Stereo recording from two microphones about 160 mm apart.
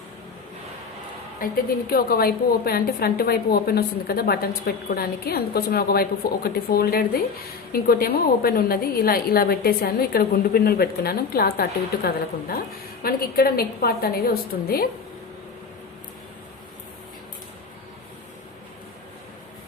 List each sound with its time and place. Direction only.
1.4 s a woman's voice: 60° left (ahead or behind)
1.9 s a woman's voice: 70° left (ahead or behind)